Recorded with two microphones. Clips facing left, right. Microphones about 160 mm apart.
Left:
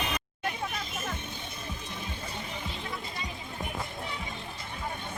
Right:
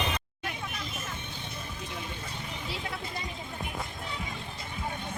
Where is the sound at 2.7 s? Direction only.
65° right (ahead or behind).